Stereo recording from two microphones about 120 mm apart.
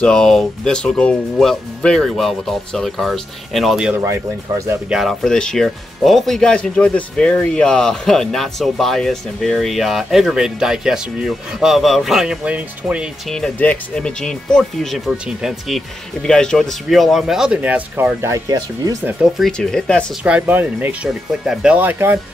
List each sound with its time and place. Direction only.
0.0 s speech: 5° left (ahead or behind)
3.9 s speech: 25° right (ahead or behind)
4.8 s speech: 5° right (ahead or behind)
13.3 s speech: 10° left (ahead or behind)
16.2 s speech: 5° left (ahead or behind); by 18.9 s 25° right (ahead or behind)
19.3 s speech: centre (ahead or behind)
20.2 s speech: 10° right (ahead or behind)
21.7 s speech: 15° right (ahead or behind)